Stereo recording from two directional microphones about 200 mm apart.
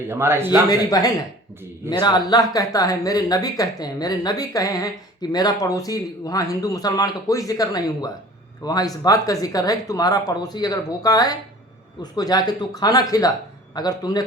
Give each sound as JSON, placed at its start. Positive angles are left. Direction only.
{"t": 0.1, "sound": "a man's voice", "side_deg": -10}
{"t": 0.7, "sound": "speech", "side_deg": 20}